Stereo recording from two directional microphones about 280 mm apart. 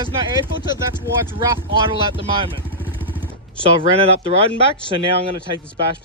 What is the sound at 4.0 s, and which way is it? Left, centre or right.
Speech, centre.